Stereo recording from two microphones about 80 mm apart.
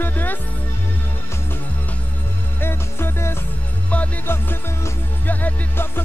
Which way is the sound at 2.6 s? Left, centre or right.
Left.